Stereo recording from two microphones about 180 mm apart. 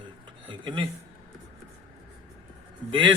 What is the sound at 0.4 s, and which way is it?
Speech, 25° right (ahead or behind).